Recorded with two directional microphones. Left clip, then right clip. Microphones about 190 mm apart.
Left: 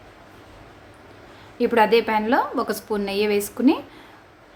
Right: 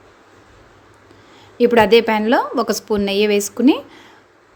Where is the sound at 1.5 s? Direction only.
35° right (ahead or behind).